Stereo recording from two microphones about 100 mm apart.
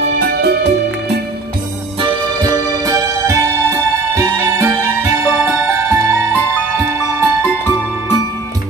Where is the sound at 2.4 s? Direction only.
35° right (ahead or behind).